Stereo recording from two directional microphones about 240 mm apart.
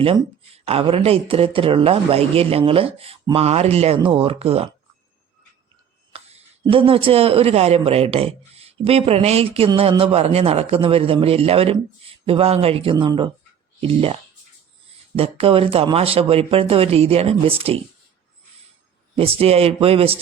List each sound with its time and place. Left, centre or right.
0.0 s speech: right
6.1 s speech: right
19.1 s speech: right